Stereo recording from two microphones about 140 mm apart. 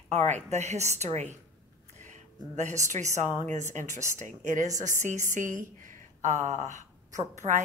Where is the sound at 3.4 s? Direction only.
60° right (ahead or behind).